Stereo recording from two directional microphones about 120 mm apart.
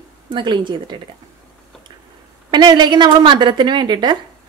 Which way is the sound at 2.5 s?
40° right (ahead or behind).